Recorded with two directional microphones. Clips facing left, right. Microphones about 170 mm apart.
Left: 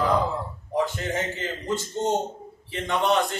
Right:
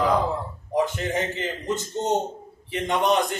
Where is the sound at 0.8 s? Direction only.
15° right (ahead or behind).